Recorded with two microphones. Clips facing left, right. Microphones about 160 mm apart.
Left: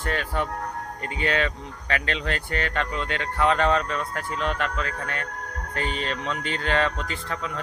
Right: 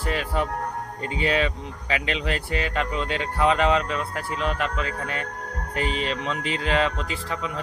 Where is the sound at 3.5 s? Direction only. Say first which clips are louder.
Right 1 dB; 5° right (ahead or behind).